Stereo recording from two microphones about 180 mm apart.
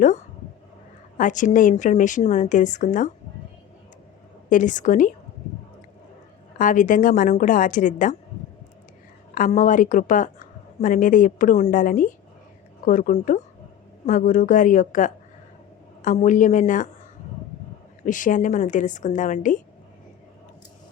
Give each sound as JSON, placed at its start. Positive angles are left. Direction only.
{"t": 1.2, "sound": "a woman's voice", "side_deg": 45}
{"t": 4.4, "sound": "a woman's voice", "side_deg": 45}
{"t": 6.6, "sound": "a woman's voice", "side_deg": 45}
{"t": 9.3, "sound": "a woman's voice", "side_deg": 45}
{"t": 18.0, "sound": "a woman's voice", "side_deg": 45}